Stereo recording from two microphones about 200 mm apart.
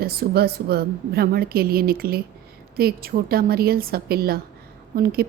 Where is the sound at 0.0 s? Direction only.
50° right (ahead or behind).